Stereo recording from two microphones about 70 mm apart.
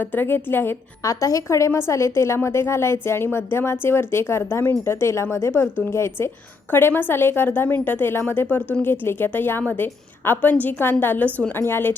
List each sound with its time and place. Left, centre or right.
0.0 s a woman's voice: left
1.0 s a woman's voice: left